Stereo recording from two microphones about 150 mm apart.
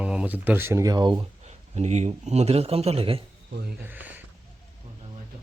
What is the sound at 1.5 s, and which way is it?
A man's voice, 50° right (ahead or behind).